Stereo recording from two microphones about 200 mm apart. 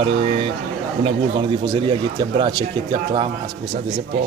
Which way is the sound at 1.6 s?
25° right (ahead or behind).